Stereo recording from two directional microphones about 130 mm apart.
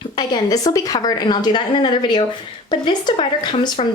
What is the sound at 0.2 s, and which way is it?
Speech, 30° left (ahead or behind).